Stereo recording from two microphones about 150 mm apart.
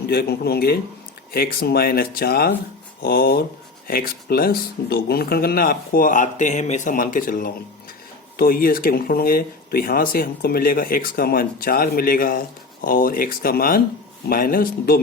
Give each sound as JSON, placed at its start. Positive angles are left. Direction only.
{"t": 0.1, "sound": "speech", "side_deg": 90}